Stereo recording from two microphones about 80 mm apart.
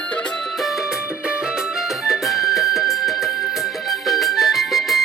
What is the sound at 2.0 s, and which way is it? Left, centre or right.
Music, centre.